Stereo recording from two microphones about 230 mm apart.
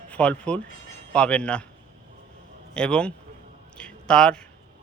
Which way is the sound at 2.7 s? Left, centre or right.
Centre.